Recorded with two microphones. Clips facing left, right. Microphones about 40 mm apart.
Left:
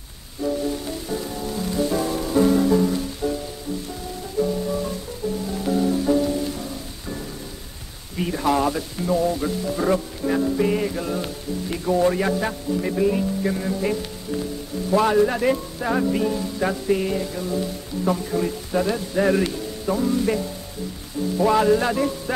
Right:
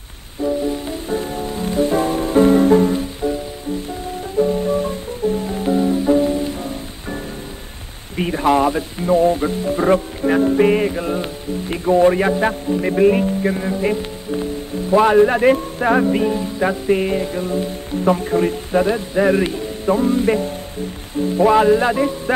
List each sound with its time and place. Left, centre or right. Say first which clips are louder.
0.4 s music: right 4 dB; right
4.4 s music: right 6 dB; right
8.2 s speech: right 5 dB; right
13.4 s speech: right 4 dB; right
21.2 s music: right 5 dB; right